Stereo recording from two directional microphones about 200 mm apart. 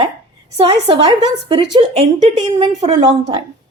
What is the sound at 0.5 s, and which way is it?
A woman's voice, 25° right (ahead or behind).